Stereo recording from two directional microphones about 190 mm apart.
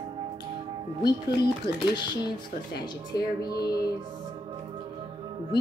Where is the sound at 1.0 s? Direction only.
20° left (ahead or behind).